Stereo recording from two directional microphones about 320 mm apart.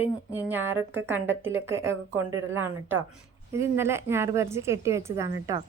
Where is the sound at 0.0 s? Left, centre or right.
Centre.